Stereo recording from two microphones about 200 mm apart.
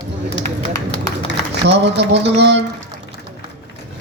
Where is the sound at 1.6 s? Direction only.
60° right (ahead or behind).